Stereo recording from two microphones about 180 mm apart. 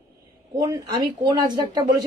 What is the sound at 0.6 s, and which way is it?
Speech, 25° right (ahead or behind).